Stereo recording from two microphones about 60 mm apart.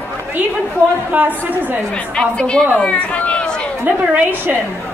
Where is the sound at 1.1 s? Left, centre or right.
Right.